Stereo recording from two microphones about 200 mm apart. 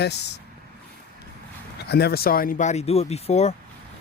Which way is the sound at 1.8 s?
55° left (ahead or behind).